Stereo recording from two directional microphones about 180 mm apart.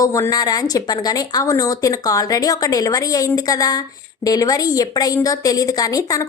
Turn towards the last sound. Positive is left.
turn(degrees=20)  # may be behind; listen again after turning